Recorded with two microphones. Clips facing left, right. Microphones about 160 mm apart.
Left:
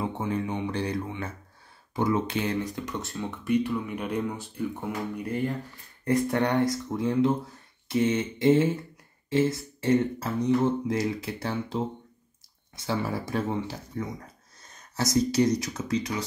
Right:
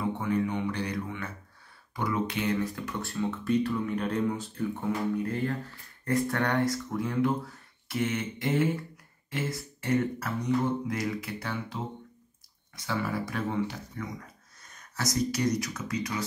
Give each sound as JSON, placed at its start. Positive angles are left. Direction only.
{"t": 0.0, "sound": "music", "side_deg": 25}
{"t": 2.0, "sound": "speech", "side_deg": 25}
{"t": 14.6, "sound": "a sound", "side_deg": 25}
{"t": 15.1, "sound": "speech", "side_deg": 25}